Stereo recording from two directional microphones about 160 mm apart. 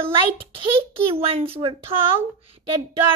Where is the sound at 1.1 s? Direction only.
35° right (ahead or behind).